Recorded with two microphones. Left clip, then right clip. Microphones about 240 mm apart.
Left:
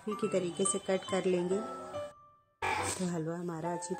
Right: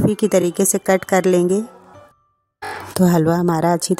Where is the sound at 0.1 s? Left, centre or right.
Right.